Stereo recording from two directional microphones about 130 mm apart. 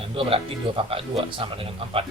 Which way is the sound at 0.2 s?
45° right (ahead or behind).